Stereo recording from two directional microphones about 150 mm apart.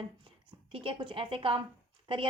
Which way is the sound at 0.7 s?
35° right (ahead or behind).